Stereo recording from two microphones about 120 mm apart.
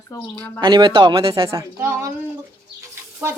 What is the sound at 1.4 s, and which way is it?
Speech, 20° right (ahead or behind).